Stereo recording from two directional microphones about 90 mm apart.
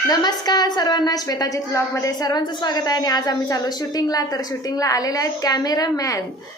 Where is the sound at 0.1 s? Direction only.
50° left (ahead or behind).